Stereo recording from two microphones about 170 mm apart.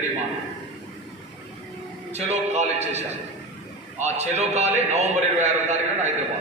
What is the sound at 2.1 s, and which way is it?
A man's voice, 40° right (ahead or behind).